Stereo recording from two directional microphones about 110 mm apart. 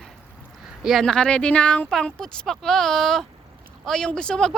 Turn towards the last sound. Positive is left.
turn(degrees=5)  # may be behind; listen again after turning